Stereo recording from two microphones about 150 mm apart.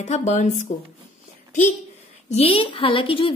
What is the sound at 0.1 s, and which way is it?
Speech, 50° left (ahead or behind).